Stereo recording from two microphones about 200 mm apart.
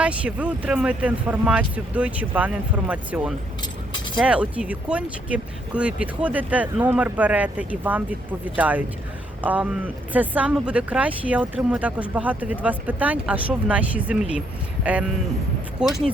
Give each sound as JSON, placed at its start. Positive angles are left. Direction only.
{"t": 0.0, "sound": "speech", "side_deg": -5}
{"t": 3.6, "sound": "keys jangling", "side_deg": 25}
{"t": 4.2, "sound": "speech", "side_deg": -5}